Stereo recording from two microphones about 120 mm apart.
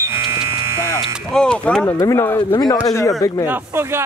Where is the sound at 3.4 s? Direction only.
20° right (ahead or behind).